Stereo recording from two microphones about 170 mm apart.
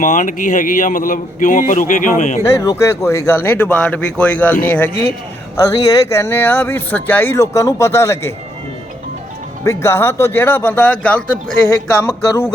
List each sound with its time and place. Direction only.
0.0 s a man's voice: 50° left (ahead or behind)
2.4 s speech: 20° left (ahead or behind)
5.5 s speech: 20° left (ahead or behind)
9.6 s speech: 15° left (ahead or behind)